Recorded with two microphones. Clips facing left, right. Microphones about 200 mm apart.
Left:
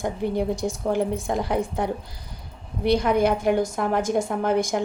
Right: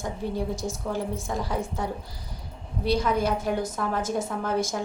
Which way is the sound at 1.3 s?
60° left (ahead or behind).